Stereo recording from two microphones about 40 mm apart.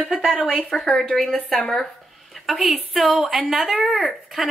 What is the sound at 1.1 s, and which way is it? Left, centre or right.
Speech, left.